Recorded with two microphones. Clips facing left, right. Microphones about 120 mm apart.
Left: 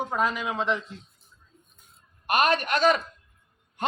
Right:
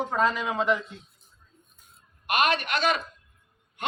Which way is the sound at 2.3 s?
40° left (ahead or behind).